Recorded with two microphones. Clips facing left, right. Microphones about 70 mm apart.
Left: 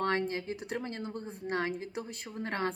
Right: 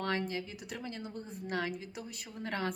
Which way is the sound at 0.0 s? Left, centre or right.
Left.